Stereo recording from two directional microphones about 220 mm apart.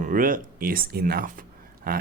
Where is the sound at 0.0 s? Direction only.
40° right (ahead or behind).